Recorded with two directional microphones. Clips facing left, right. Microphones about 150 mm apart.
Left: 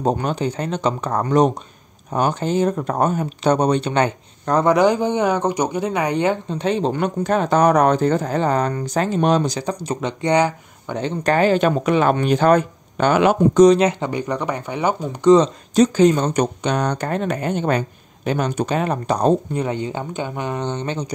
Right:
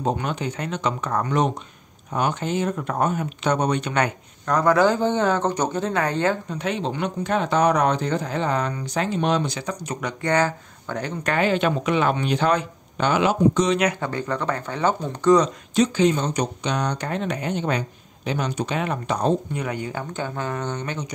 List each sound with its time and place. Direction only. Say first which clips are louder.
0.0 s speech: left 5 dB; 35° left (ahead or behind); by 6.3 s 15° left (ahead or behind)
6.5 s speech: left 6 dB; 30° left (ahead or behind)
6.9 s speech: left 4 dB; 45° left (ahead or behind); by 11.1 s 20° left (ahead or behind)
11.2 s speech: left 5 dB; 40° left (ahead or behind); by 13.7 s 55° left (ahead or behind)
13.7 s speech: left 7 dB; 25° left (ahead or behind); by 15.3 s 10° left (ahead or behind)
15.7 s speech: left 5 dB; 40° left (ahead or behind)